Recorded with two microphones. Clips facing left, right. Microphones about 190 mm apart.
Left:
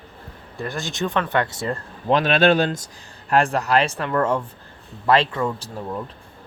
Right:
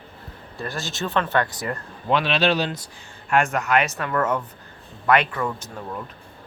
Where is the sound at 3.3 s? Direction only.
35° left (ahead or behind).